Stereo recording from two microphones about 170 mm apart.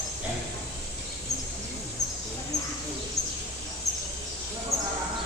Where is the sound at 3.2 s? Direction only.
Centre (ahead or behind).